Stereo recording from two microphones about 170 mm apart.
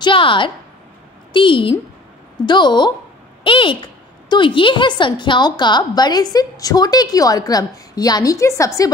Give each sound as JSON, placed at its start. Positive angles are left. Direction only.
{"t": 0.0, "sound": "a woman's voice", "side_deg": 30}